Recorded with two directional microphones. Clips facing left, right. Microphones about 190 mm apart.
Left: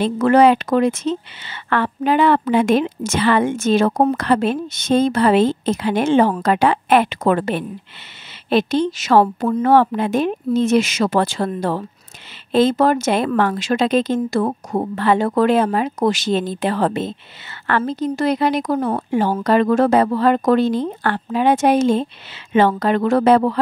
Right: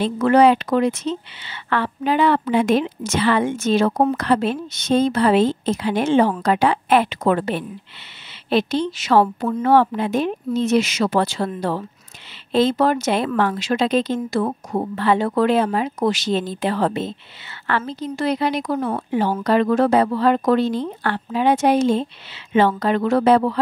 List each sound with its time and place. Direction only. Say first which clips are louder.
0.0 s speech: left 1 dB; 50° left (ahead or behind)